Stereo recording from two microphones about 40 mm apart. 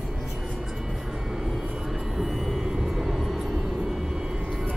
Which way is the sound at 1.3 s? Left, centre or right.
Centre.